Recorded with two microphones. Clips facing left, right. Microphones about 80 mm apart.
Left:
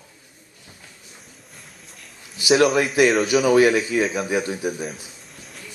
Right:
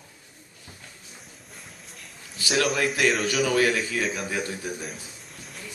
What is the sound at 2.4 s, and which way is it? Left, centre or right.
Speech, centre.